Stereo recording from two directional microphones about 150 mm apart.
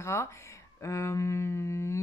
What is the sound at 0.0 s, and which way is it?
Speech, 20° left (ahead or behind).